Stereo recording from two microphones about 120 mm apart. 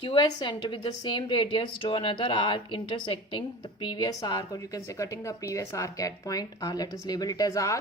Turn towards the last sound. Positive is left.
turn(degrees=25)  # may be behind; listen again after turning